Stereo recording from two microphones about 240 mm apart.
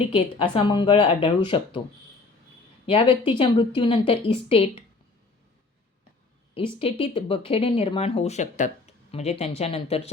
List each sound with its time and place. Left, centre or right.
0.3 s speech: left
2.8 s speech: left
6.5 s speech: left